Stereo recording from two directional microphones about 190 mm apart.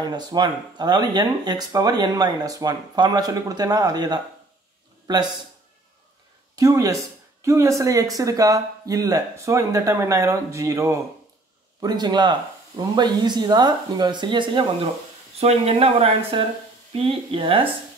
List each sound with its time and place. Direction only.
0.0 s a man's voice: 20° right (ahead or behind)
6.5 s speech: 20° right (ahead or behind)